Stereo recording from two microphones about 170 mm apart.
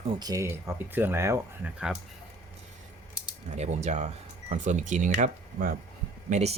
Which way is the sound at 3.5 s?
40° right (ahead or behind).